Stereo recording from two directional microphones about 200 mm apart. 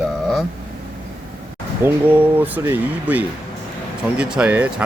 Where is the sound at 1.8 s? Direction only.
10° right (ahead or behind).